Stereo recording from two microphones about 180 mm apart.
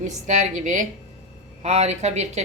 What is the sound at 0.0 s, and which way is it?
A woman's voice, 45° right (ahead or behind).